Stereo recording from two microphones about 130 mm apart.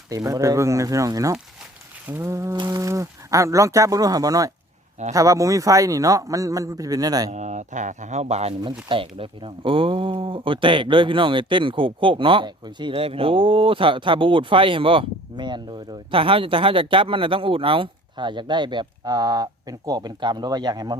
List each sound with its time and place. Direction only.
0.1 s a man's voice: 25° right (ahead or behind)
7.3 s speech: 65° right (ahead or behind)
8.9 s speech: 45° right (ahead or behind)
12.9 s speech: 45° right (ahead or behind)